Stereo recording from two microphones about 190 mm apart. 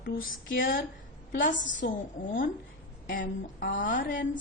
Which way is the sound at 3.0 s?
45° left (ahead or behind).